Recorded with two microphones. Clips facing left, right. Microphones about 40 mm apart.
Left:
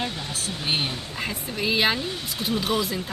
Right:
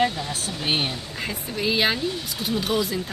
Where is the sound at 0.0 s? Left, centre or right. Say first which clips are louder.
Right 6 dB; right.